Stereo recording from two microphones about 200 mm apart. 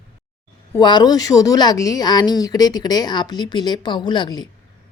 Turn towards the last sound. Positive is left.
turn(degrees=20)  # may be behind; listen again after turning